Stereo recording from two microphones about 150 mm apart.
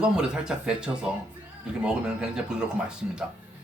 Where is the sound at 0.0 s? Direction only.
5° right (ahead or behind).